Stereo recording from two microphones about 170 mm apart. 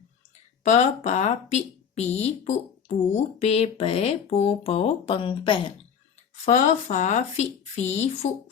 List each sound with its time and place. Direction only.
0.6 s speech: 40° left (ahead or behind)
6.4 s speech: 45° left (ahead or behind)